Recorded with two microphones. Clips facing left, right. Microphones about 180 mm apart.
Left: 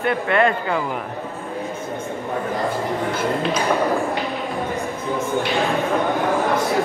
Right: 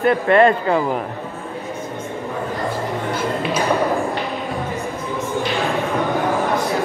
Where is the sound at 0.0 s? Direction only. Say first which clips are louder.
Right 5 dB; 35° right (ahead or behind).